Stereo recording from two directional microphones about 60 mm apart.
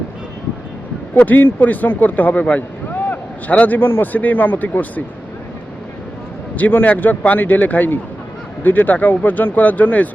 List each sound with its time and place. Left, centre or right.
1.2 s speech: left
6.6 s speech: left